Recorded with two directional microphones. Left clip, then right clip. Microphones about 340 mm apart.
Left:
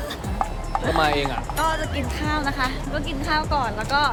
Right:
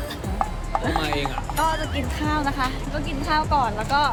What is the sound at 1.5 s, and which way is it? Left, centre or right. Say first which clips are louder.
A woman's voice: right 2 dB; centre.